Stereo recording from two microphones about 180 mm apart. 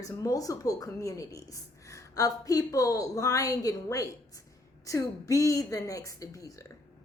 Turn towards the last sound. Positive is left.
turn(degrees=20)  # may be behind; listen again after turning